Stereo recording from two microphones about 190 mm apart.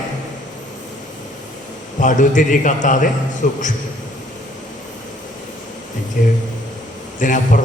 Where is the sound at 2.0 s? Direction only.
40° left (ahead or behind).